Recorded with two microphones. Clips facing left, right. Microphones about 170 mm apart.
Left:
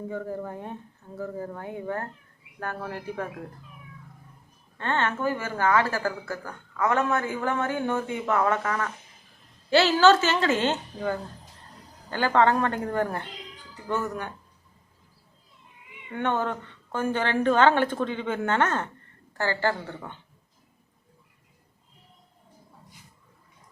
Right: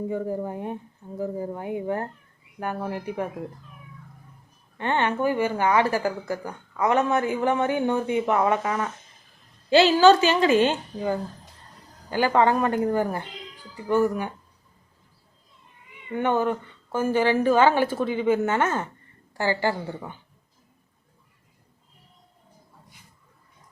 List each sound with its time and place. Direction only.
0.1 s a woman's voice: 15° right (ahead or behind)
4.8 s a woman's voice: 15° right (ahead or behind)
16.0 s a woman's voice: 5° right (ahead or behind)